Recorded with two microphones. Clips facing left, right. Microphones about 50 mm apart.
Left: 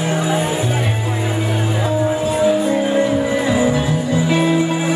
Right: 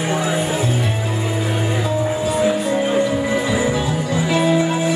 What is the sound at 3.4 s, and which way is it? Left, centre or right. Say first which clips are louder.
Music: left 3 dB; left.